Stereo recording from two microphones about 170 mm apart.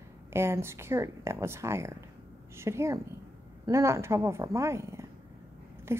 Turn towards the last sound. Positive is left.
turn(degrees=-15)  # may be behind; listen again after turning